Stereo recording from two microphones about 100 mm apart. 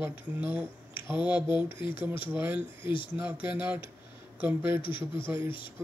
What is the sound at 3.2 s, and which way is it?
Speech, 20° right (ahead or behind).